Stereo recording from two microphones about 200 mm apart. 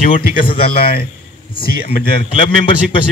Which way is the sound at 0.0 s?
40° left (ahead or behind).